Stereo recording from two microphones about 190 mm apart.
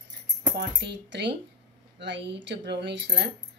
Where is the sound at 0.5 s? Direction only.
65° right (ahead or behind).